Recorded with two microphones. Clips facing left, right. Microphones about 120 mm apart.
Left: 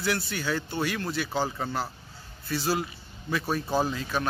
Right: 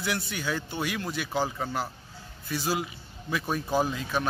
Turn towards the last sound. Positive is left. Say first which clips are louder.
# even
turn(degrees=-15)  # may be behind; listen again after turning